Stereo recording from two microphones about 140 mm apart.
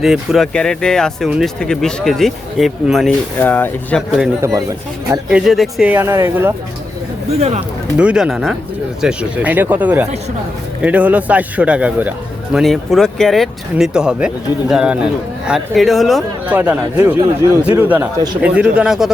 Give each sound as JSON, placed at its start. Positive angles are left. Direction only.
{"t": 0.0, "sound": "speech", "side_deg": 0}
{"t": 3.3, "sound": "speech", "side_deg": 15}
{"t": 5.3, "sound": "speech", "side_deg": 0}
{"t": 5.9, "sound": "speech", "side_deg": -20}
{"t": 7.3, "sound": "speech", "side_deg": -50}
{"t": 7.9, "sound": "a man's voice", "side_deg": -5}
{"t": 12.5, "sound": "speech", "side_deg": 0}
{"t": 16.5, "sound": "a man's voice", "side_deg": -10}
{"t": 17.2, "sound": "speech", "side_deg": -20}
{"t": 17.7, "sound": "a man's voice", "side_deg": -10}